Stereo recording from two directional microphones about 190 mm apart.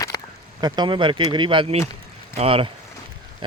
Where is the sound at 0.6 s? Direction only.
20° right (ahead or behind).